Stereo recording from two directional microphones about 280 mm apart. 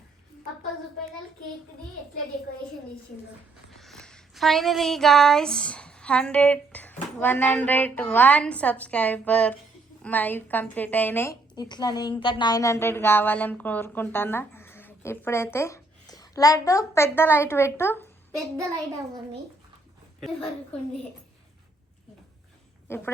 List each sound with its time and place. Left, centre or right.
3.8 s a woman's voice: centre
22.9 s a woman's voice: centre